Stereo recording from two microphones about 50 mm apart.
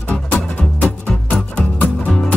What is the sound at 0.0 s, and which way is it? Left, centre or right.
Music, left.